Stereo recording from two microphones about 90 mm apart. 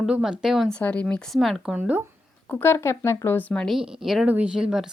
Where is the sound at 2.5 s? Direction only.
25° left (ahead or behind).